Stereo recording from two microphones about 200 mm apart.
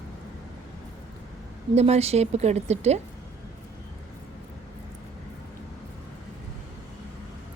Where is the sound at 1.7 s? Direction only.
30° right (ahead or behind).